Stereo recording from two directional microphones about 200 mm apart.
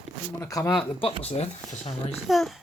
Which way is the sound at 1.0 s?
30° left (ahead or behind).